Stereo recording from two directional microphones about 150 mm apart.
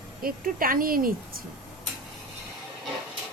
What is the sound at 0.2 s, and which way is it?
A woman's voice, 75° right (ahead or behind).